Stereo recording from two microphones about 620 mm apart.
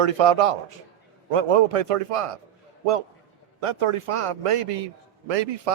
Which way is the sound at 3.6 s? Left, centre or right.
Right.